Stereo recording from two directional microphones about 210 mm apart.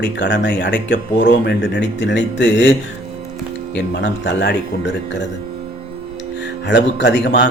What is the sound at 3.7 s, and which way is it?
Speech, 55° left (ahead or behind).